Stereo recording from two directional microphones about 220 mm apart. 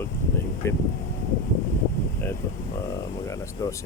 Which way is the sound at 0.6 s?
10° left (ahead or behind).